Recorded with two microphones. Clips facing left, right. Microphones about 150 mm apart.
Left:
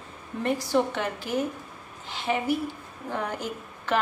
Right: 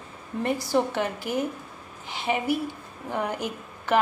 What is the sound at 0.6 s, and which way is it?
A woman's voice, 10° right (ahead or behind).